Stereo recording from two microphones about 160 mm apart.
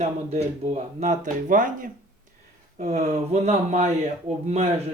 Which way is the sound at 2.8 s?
45° right (ahead or behind).